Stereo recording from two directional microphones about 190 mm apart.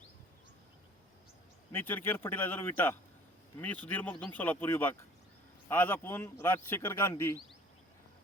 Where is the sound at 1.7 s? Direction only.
10° left (ahead or behind).